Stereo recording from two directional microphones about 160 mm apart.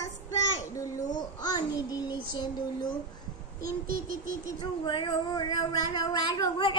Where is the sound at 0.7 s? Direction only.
20° left (ahead or behind).